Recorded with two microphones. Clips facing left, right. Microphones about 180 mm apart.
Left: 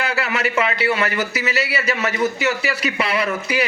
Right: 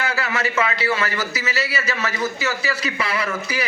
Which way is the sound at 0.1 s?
30° left (ahead or behind).